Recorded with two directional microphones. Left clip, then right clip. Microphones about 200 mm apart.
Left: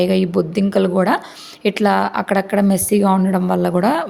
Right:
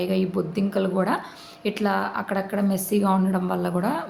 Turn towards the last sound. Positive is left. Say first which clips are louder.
# left 9 dB
turn(degrees=40)  # may be behind; listen again after turning